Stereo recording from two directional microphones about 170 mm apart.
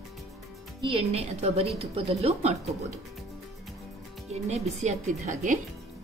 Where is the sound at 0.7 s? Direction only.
30° right (ahead or behind).